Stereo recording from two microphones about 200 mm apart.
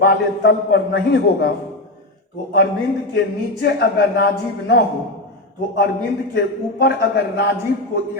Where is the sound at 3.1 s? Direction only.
55° left (ahead or behind).